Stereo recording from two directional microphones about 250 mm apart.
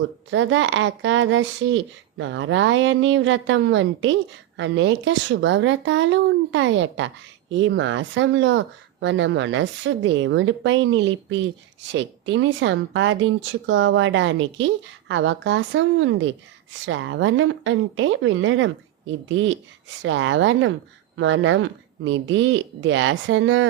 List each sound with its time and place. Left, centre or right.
0.3 s speech: right